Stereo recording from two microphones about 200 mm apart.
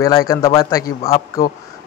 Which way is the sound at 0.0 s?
15° left (ahead or behind).